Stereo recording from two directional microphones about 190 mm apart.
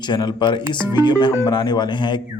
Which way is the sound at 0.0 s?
25° left (ahead or behind).